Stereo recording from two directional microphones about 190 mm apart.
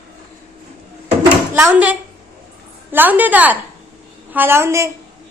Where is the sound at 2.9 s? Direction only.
10° right (ahead or behind).